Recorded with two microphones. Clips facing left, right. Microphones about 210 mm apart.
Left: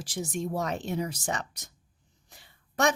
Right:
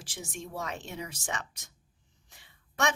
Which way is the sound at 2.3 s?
40° left (ahead or behind).